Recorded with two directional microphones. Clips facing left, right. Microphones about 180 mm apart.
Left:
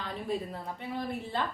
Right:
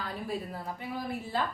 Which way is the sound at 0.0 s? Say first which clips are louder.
Left 1 dB; 5° right (ahead or behind).